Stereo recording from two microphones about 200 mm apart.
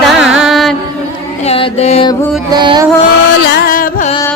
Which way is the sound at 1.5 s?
30° left (ahead or behind).